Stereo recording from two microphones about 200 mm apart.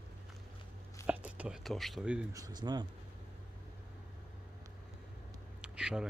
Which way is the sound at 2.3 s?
20° right (ahead or behind).